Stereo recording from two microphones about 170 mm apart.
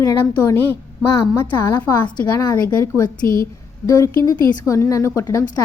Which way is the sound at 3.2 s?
55° left (ahead or behind).